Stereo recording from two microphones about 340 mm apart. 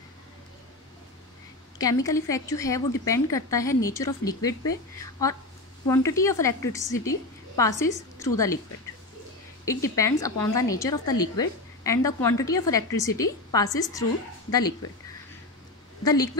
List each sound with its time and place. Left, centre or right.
1.8 s a woman's voice: centre
9.7 s a woman's voice: centre
16.0 s a woman's voice: centre